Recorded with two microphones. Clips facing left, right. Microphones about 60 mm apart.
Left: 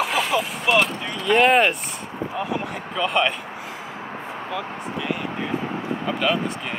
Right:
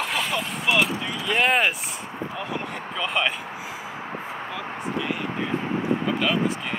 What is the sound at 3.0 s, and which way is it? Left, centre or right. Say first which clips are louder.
Speech: left 4 dB; centre.